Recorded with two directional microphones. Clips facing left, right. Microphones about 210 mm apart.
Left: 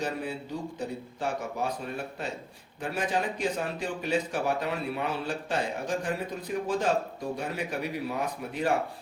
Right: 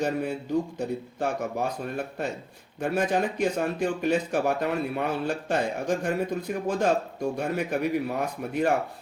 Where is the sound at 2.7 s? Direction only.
55° right (ahead or behind).